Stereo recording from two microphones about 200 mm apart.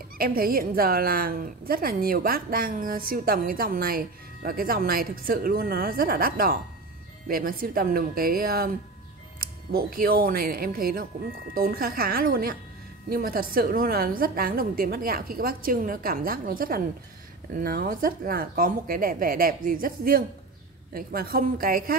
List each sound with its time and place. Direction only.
0.2 s a woman's voice: 50° right (ahead or behind)
9.7 s a woman's voice: 50° right (ahead or behind)